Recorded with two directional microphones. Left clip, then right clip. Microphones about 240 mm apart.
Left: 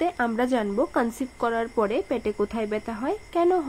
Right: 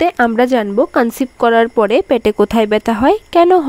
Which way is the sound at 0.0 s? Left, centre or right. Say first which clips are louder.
Right 12 dB; right.